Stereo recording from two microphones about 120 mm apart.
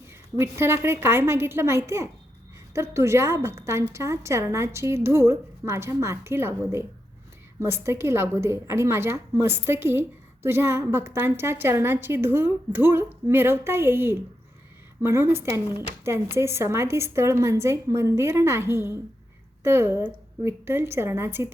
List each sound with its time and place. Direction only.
0.3 s a woman's voice: 20° right (ahead or behind)